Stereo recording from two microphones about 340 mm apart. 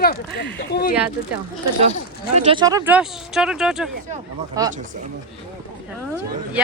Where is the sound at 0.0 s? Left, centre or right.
Left.